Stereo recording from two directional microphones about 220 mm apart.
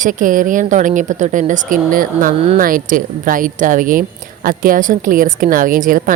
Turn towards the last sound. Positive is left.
turn(degrees=-40)  # may be behind; listen again after turning